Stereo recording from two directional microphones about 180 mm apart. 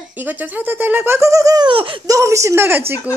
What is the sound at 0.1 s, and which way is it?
Speech, 10° right (ahead or behind).